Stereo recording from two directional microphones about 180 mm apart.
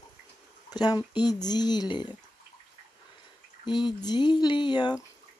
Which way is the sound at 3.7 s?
25° left (ahead or behind).